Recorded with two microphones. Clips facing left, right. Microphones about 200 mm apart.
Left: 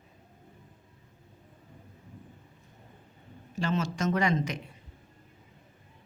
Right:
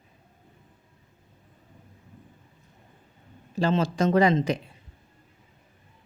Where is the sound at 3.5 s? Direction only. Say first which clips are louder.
Right 6 dB; 35° right (ahead or behind).